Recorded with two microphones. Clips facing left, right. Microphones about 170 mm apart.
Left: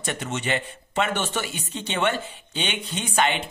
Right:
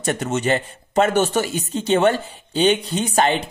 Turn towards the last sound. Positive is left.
turn(degrees=-40)  # may be behind; listen again after turning